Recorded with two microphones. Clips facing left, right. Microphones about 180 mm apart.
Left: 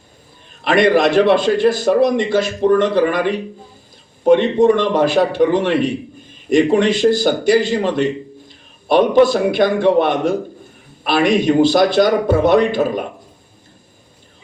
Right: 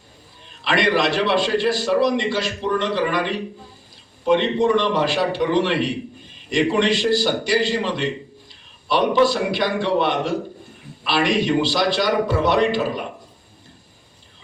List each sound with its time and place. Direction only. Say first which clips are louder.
0.6 s a man's voice: left 6 dB; 50° left (ahead or behind)